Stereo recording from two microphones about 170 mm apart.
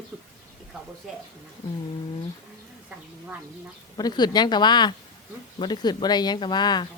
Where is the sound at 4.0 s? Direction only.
25° left (ahead or behind).